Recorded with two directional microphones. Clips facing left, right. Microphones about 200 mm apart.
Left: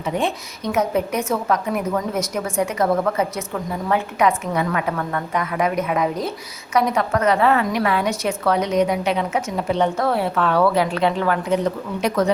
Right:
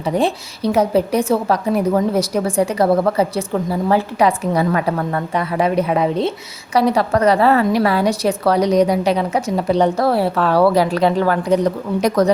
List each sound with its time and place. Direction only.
0.0 s speech: 35° right (ahead or behind)